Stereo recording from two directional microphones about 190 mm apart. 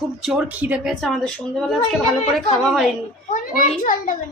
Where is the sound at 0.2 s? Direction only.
5° right (ahead or behind).